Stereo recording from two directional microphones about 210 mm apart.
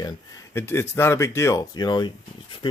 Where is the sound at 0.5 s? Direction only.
10° left (ahead or behind).